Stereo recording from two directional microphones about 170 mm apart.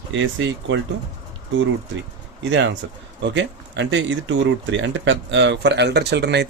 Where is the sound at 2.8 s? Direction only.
90° right.